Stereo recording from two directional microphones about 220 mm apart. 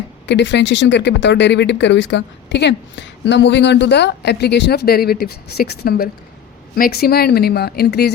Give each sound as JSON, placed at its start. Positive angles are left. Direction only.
{"t": 0.3, "sound": "speech", "side_deg": 55}